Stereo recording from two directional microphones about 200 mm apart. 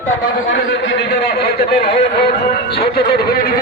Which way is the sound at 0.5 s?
65° left (ahead or behind).